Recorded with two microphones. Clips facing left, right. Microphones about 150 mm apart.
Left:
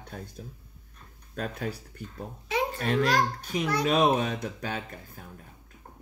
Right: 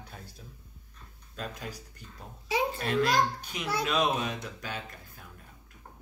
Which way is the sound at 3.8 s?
50° left (ahead or behind).